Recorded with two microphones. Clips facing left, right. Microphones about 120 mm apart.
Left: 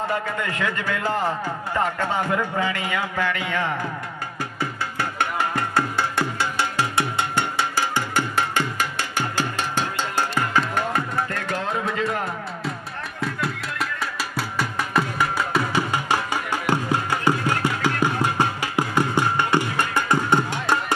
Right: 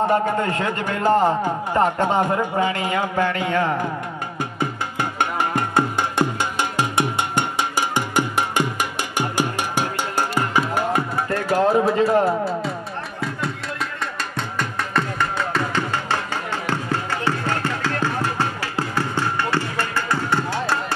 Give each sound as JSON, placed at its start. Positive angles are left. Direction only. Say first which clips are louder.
{"t": 0.1, "sound": "a man's voice", "louder": "right 7 dB", "side_deg": -35}
{"t": 1.4, "sound": "speech", "louder": "right 5 dB", "side_deg": -25}
{"t": 2.5, "sound": "a man's voice", "louder": "right 4 dB", "side_deg": -30}
{"t": 4.6, "sound": "music", "louder": "right 2 dB", "side_deg": -20}
{"t": 11.5, "sound": "music", "louder": "right 10 dB", "side_deg": -35}
{"t": 13.2, "sound": "music", "louder": "left 1 dB", "side_deg": 0}